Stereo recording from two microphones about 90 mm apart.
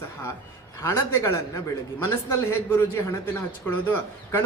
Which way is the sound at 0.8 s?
30° left (ahead or behind).